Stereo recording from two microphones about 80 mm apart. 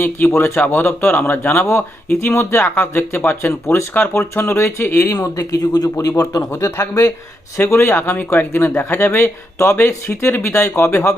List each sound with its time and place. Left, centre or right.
0.0 s a man's voice: left
5.1 s speech: left
6.5 s a man's voice: left